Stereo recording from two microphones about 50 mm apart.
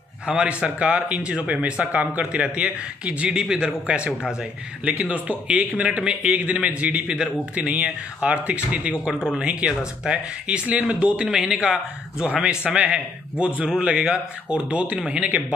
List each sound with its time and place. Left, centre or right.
0.3 s a man's voice: centre